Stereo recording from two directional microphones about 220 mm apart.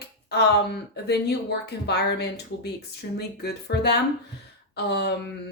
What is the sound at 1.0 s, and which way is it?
Speech, 50° left (ahead or behind).